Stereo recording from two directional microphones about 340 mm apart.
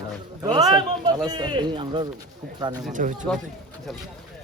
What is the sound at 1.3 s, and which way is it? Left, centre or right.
A man's voice, centre.